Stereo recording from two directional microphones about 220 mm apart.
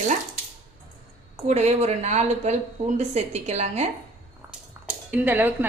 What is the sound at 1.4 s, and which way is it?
A woman's voice, 30° right (ahead or behind).